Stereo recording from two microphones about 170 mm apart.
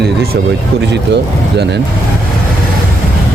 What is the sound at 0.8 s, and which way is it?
Speech, 90° right.